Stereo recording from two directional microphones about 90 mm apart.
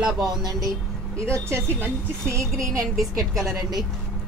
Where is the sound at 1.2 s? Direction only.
30° right (ahead or behind).